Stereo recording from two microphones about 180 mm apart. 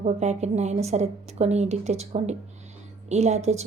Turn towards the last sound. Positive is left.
turn(degrees=-40)  # may be behind; listen again after turning